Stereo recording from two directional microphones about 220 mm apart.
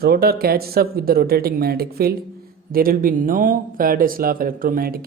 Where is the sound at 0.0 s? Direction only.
45° right (ahead or behind).